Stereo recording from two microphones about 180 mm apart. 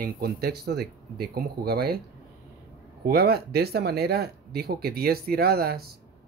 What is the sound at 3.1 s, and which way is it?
Speech, 60° right (ahead or behind).